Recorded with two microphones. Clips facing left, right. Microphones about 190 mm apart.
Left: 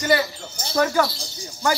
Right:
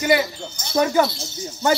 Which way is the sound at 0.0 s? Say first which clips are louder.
Right 2 dB; 10° right (ahead or behind).